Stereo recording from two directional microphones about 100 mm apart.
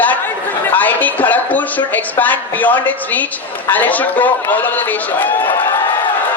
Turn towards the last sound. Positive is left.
turn(degrees=20)  # may be behind; listen again after turning